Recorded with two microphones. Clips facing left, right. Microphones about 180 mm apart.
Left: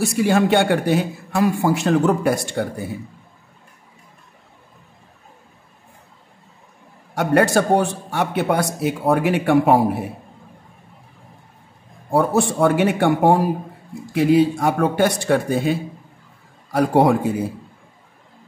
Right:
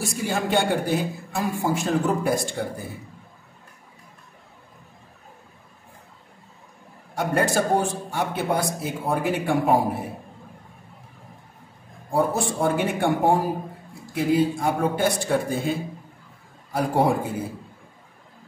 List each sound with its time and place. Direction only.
0.0 s a man's voice: 70° left (ahead or behind)
7.2 s a man's voice: 70° left (ahead or behind)
12.1 s a man's voice: 70° left (ahead or behind)